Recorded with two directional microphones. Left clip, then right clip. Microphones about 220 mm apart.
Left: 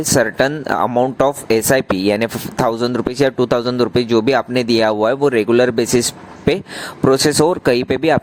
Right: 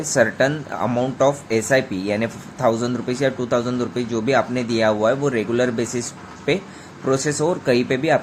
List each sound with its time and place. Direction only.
0.1 s speech: 40° left (ahead or behind)